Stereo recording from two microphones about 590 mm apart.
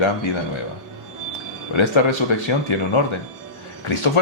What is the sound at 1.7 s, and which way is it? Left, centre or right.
Speech, left.